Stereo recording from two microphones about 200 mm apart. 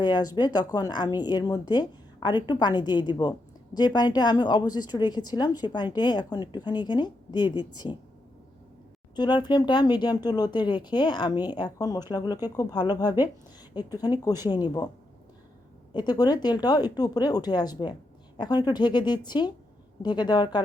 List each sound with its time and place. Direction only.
0.0 s speech: 20° left (ahead or behind)
9.1 s speech: 20° left (ahead or behind)
15.9 s speech: 20° left (ahead or behind)